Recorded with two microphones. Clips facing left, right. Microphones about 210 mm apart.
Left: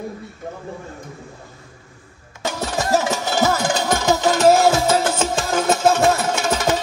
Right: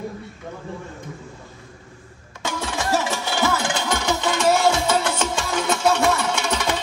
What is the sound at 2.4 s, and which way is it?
Music, 40° left (ahead or behind).